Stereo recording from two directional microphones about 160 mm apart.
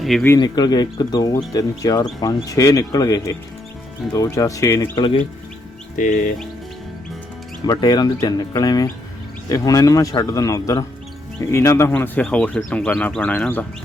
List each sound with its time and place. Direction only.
0.0 s speech: centre (ahead or behind)
0.3 s speech: 25° left (ahead or behind)
6.0 s music: 55° left (ahead or behind)
7.7 s speech: 25° left (ahead or behind)